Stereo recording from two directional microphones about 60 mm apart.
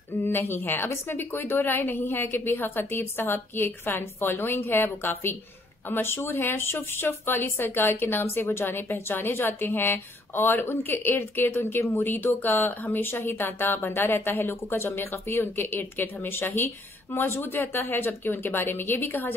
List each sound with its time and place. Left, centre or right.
0.2 s a woman's voice: left